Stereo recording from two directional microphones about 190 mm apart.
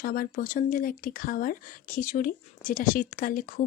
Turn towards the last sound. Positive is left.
turn(degrees=45)  # may be behind; listen again after turning